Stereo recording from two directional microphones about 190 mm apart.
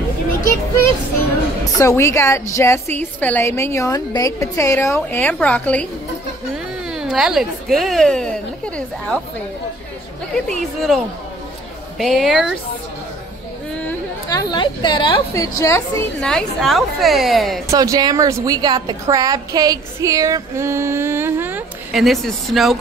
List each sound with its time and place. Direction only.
1.8 s a woman's voice: 15° left (ahead or behind)
6.9 s a woman's voice: 5° right (ahead or behind)
10.3 s a woman's voice: centre (ahead or behind)
12.0 s a woman's voice: centre (ahead or behind)
14.3 s a woman's voice: 20° left (ahead or behind)
16.3 s a woman's voice: centre (ahead or behind)
17.6 s a woman's voice: 20° right (ahead or behind); by 22.8 s centre (ahead or behind)